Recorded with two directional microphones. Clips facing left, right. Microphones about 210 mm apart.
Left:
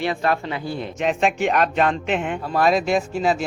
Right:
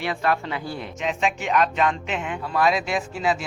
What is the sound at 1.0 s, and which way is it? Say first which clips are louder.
Speech: left 5 dB; 55° left (ahead or behind).